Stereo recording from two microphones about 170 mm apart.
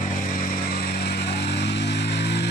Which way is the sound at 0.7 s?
70° left (ahead or behind).